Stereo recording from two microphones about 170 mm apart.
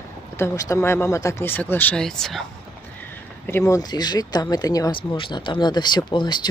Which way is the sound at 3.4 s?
15° left (ahead or behind).